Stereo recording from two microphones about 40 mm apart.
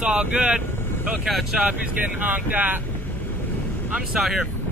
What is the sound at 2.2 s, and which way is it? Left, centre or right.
Speech, right.